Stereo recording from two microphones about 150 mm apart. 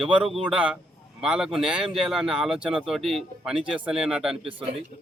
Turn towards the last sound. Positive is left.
turn(degrees=-35)  # may be behind; listen again after turning